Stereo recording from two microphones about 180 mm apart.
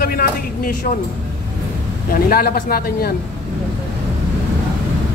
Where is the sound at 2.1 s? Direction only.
55° left (ahead or behind).